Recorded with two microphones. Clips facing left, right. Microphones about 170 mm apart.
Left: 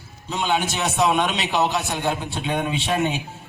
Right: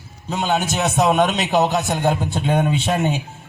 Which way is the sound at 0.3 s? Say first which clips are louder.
Right 2 dB; 45° right (ahead or behind).